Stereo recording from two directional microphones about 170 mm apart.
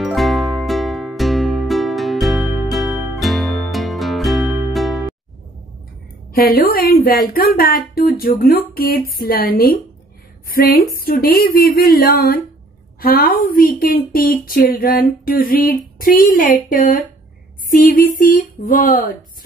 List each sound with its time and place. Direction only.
0.0 s music: centre (ahead or behind)
6.3 s speech: 60° left (ahead or behind)